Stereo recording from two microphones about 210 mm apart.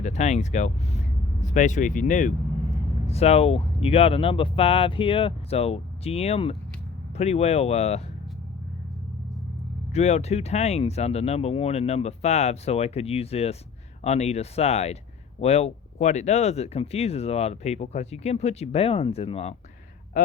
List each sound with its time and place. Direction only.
0.0 s speech: 35° left (ahead or behind)
9.9 s speech: 30° left (ahead or behind)